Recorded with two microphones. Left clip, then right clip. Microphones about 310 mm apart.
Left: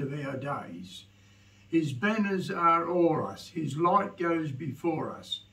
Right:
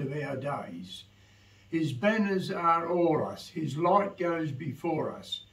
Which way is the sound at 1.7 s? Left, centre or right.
Centre.